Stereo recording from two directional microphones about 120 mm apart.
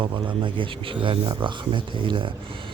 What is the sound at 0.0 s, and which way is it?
Speech, 45° right (ahead or behind).